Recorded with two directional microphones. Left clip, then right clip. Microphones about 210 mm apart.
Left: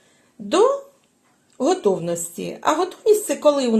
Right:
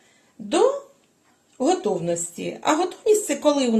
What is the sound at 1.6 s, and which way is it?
A woman's voice, 30° left (ahead or behind).